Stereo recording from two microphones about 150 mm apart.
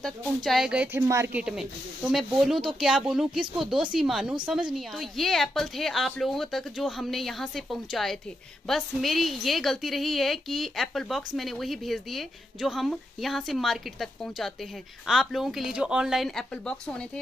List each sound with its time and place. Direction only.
0.0 s a woman's voice: centre (ahead or behind)
1.0 s speech: 15° right (ahead or behind)
1.4 s a woman's voice: 5° right (ahead or behind)